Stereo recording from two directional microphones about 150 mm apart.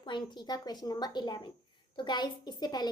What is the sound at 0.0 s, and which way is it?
A woman's voice, 30° left (ahead or behind).